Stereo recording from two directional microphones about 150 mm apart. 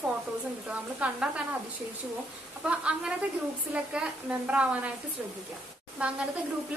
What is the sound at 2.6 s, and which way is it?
A woman's voice, 10° right (ahead or behind).